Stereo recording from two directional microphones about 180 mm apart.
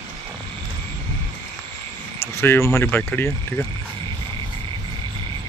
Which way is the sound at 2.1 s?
15° left (ahead or behind).